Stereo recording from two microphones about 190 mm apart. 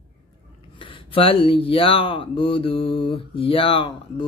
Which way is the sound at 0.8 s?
25° left (ahead or behind).